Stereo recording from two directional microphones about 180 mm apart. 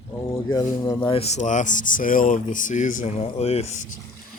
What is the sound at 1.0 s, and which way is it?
Speech, 35° left (ahead or behind).